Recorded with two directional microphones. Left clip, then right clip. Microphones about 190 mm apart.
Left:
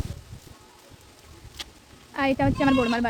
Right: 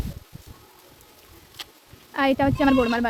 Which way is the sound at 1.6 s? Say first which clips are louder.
Even; 10° right (ahead or behind).